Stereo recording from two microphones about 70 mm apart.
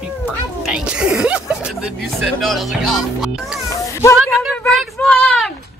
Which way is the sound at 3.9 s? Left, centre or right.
Left.